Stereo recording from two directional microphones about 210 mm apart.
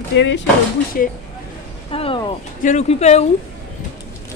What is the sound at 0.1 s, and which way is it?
Speech, 60° left (ahead or behind).